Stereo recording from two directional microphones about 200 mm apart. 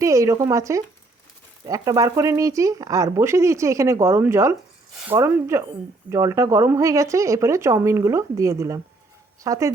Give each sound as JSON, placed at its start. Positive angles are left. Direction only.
{"t": 0.0, "sound": "speech", "side_deg": -15}